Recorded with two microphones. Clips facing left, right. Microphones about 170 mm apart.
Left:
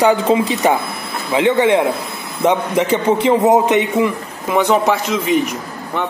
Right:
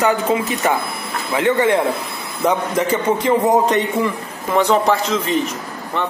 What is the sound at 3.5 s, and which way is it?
Speech, 15° left (ahead or behind).